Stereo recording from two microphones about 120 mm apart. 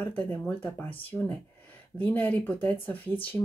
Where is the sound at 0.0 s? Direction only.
15° left (ahead or behind).